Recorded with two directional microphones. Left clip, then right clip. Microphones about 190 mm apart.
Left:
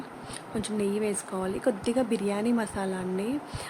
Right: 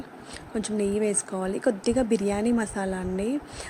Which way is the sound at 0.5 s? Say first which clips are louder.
Right 3 dB; 20° right (ahead or behind).